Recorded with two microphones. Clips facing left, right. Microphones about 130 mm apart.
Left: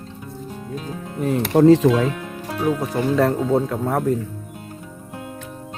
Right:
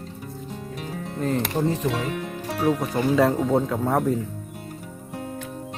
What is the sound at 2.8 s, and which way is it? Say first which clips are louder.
Speech: left 2 dB; centre (ahead or behind).